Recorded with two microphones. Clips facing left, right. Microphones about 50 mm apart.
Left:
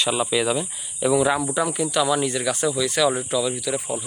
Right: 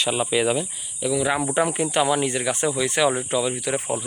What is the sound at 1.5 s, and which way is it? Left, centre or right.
Speech, right.